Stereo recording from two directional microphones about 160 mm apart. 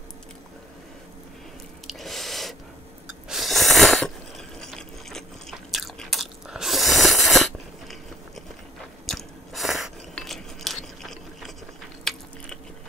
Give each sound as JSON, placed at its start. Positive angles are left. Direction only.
{"t": 1.9, "sound": "a sound", "side_deg": 0}
{"t": 4.6, "sound": "biting", "side_deg": 5}
{"t": 9.0, "sound": "chewing", "side_deg": 0}
{"t": 11.0, "sound": "scrape", "side_deg": 0}
{"t": 12.0, "sound": "biting", "side_deg": 5}